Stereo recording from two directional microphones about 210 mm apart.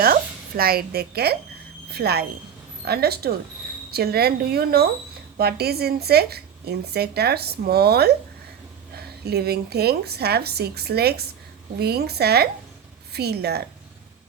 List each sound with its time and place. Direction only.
0.0 s a woman's voice: 45° right (ahead or behind)